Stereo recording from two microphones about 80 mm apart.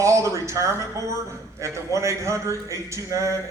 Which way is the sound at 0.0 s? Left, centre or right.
Right.